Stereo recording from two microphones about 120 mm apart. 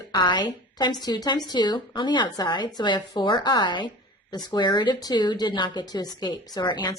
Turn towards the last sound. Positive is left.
turn(degrees=35)  # may be behind; listen again after turning